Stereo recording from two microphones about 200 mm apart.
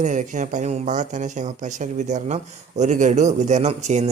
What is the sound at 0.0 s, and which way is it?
Speech, 40° right (ahead or behind).